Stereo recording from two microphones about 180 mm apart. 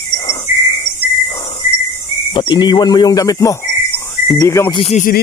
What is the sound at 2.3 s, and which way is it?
Cricket, 25° left (ahead or behind).